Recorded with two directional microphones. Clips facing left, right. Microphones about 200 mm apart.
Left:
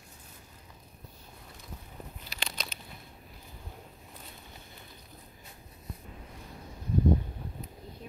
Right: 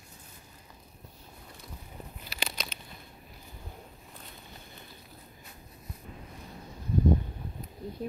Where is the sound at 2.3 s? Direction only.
5° right (ahead or behind).